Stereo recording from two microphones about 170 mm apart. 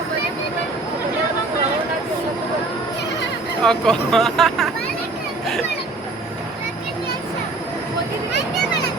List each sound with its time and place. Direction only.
3.6 s speech: 5° left (ahead or behind)